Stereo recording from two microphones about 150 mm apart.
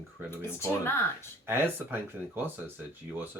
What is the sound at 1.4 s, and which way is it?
Speech, 15° right (ahead or behind).